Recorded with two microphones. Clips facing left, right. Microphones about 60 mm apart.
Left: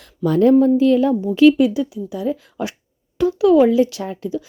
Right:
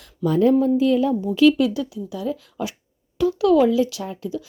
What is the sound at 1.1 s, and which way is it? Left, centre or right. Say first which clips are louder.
A woman's voice: left 4 dB; left.